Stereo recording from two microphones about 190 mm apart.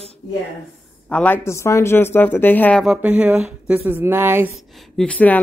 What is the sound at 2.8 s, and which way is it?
Speech, 5° right (ahead or behind).